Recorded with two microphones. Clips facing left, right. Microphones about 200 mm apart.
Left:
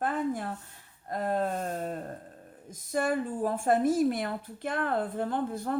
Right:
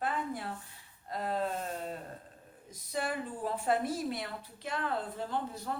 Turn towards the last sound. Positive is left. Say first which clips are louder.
# left 6 dB
turn(degrees=55)  # may be behind; listen again after turning